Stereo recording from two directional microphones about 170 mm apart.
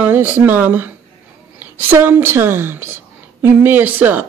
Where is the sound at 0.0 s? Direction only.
10° right (ahead or behind).